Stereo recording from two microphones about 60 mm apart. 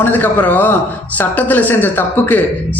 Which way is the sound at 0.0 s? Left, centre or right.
Left.